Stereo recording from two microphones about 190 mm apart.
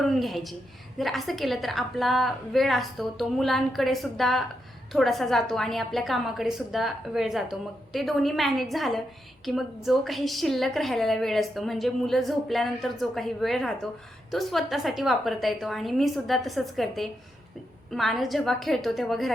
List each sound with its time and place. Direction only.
0.0 s a woman's voice: centre (ahead or behind)